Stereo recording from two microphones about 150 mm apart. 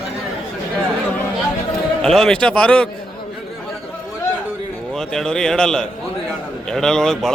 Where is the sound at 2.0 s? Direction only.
5° left (ahead or behind).